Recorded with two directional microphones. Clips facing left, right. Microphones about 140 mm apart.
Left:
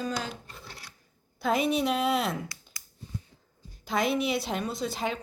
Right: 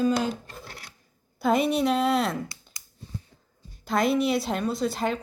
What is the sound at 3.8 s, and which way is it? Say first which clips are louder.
A woman's voice: right 4 dB; centre (ahead or behind).